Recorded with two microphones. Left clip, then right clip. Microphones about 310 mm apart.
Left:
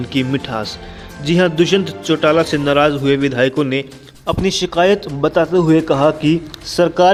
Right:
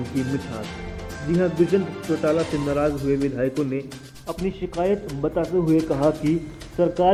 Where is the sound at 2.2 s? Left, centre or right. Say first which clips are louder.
Left 9 dB; left.